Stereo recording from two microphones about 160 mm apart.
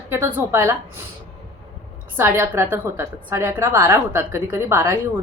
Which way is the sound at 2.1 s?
15° right (ahead or behind).